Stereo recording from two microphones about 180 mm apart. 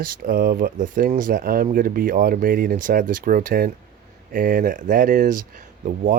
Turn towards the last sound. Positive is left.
turn(degrees=-50)  # may be behind; listen again after turning